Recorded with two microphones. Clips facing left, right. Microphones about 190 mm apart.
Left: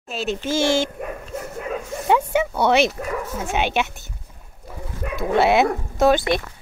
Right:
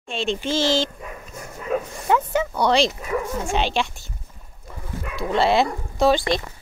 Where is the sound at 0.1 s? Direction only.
5° left (ahead or behind).